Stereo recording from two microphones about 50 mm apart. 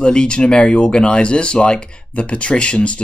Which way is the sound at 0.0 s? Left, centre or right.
Centre.